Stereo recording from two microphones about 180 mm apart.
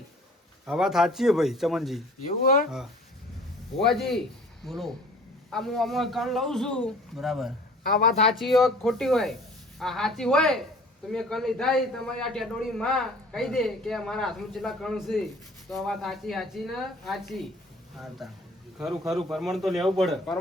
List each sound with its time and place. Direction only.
0.6 s a man's voice: centre (ahead or behind)
2.4 s speech: 55° left (ahead or behind)
3.8 s a man's voice: centre (ahead or behind)